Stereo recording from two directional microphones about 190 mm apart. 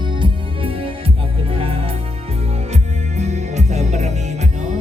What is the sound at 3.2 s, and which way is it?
Music, 35° right (ahead or behind).